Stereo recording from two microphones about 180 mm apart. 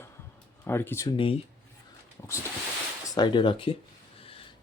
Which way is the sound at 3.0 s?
20° left (ahead or behind).